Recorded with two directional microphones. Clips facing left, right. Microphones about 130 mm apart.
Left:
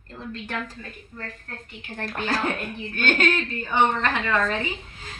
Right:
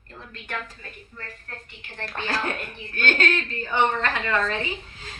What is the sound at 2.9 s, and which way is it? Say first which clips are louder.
Speech: left 1 dB; 15° left (ahead or behind).